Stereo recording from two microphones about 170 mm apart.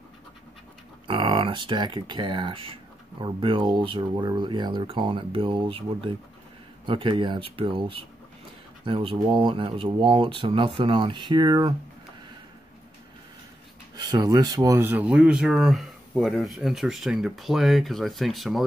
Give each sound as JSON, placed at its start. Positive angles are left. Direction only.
{"t": 1.0, "sound": "speech", "side_deg": -30}
{"t": 13.9, "sound": "speech", "side_deg": -25}